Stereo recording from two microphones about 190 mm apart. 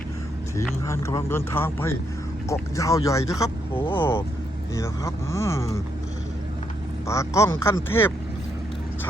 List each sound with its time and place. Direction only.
0.9 s speech: 15° left (ahead or behind)
7.1 s speech: 15° left (ahead or behind)